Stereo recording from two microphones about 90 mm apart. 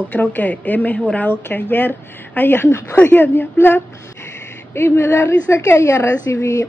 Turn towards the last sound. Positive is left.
turn(degrees=35)  # may be behind; listen again after turning